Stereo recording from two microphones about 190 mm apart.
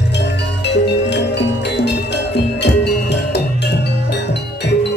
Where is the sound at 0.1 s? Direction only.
65° left (ahead or behind).